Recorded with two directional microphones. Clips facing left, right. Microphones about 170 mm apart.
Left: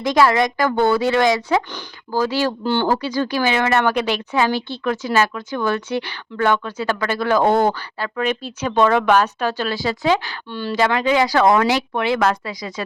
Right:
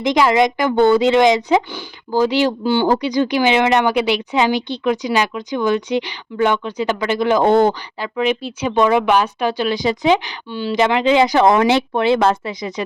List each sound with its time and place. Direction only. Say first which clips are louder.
0.0 s speech: right 2 dB; 20° right (ahead or behind)